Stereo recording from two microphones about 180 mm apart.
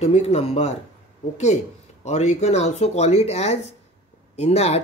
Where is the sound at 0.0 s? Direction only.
35° left (ahead or behind).